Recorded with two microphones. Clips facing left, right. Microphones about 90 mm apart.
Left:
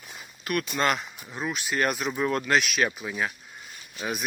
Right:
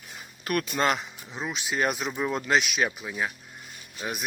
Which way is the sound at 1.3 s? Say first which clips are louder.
Left 1 dB; 15° right (ahead or behind).